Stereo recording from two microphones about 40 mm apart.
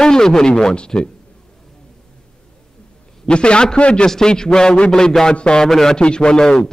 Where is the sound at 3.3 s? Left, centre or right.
Left.